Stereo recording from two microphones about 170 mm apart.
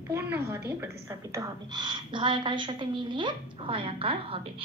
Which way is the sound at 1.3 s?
20° right (ahead or behind).